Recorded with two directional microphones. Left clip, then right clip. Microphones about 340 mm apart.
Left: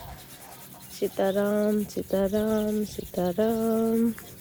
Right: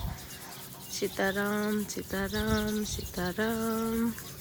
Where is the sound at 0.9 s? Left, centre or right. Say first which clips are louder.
Left 5 dB; centre.